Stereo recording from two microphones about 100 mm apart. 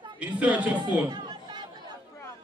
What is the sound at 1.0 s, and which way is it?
Chatter, 50° right (ahead or behind).